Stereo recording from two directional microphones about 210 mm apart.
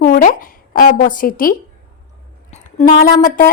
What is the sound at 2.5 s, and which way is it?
Speech, 30° left (ahead or behind).